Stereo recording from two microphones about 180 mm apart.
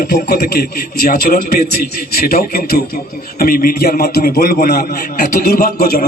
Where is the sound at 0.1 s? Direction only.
55° left (ahead or behind).